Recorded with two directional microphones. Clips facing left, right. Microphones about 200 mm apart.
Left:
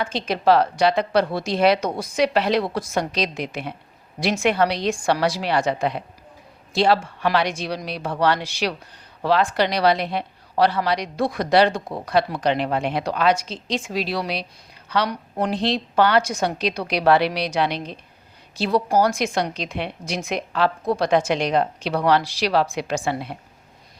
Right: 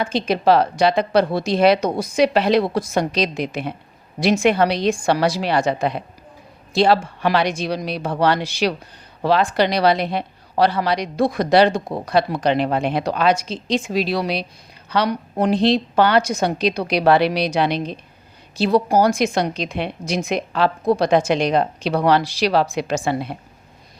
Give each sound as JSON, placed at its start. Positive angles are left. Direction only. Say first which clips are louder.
{"t": 0.3, "sound": "a woman's voice", "louder": "right 1 dB", "side_deg": -20}
{"t": 6.7, "sound": "a woman's voice", "louder": "right 3 dB", "side_deg": -25}
{"t": 22.6, "sound": "a woman's voice", "louder": "right 3 dB", "side_deg": -35}